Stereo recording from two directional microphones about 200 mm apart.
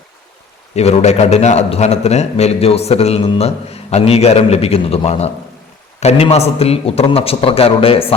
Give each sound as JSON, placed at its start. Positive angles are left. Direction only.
{"t": 0.8, "sound": "a man's voice", "side_deg": 30}